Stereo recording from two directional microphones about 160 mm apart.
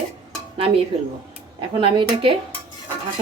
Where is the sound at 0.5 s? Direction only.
35° right (ahead or behind).